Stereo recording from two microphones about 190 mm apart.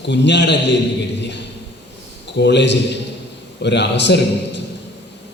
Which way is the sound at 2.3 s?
65° left (ahead or behind).